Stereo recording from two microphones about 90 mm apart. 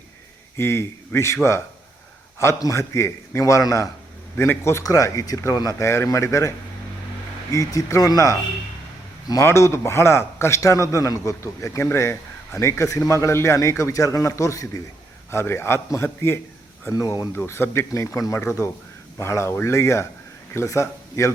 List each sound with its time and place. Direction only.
0.5 s a man's voice: 30° left (ahead or behind)
7.5 s a man's voice: 40° left (ahead or behind)
9.4 s a man's voice: 30° left (ahead or behind)
16.9 s a man's voice: 40° left (ahead or behind)
17.3 s a man's voice: 25° left (ahead or behind)